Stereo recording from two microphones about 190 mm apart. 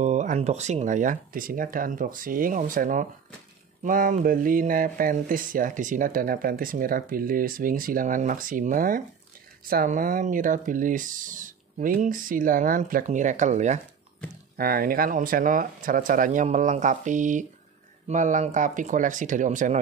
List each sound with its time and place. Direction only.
0.0 s speech: 40° right (ahead or behind)
14.6 s speech: 50° right (ahead or behind)